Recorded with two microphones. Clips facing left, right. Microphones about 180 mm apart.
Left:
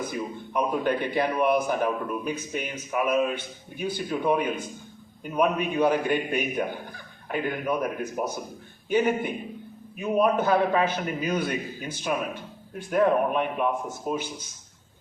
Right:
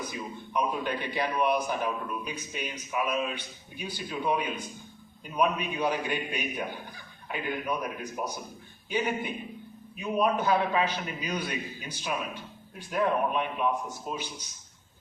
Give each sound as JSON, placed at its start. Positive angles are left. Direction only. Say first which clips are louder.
{"t": 0.0, "sound": "a man's voice", "louder": "left 6 dB", "side_deg": 50}